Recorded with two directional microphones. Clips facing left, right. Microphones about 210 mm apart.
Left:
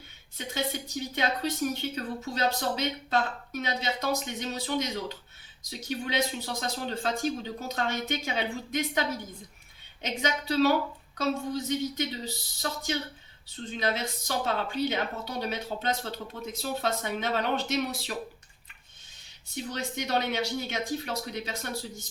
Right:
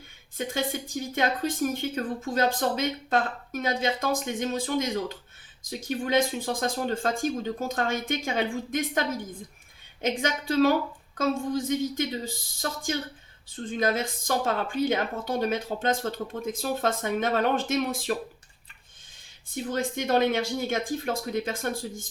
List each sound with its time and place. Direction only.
0.3 s a woman's voice: 50° right (ahead or behind)
13.7 s a woman's voice: 50° right (ahead or behind)
19.7 s a woman's voice: 50° right (ahead or behind)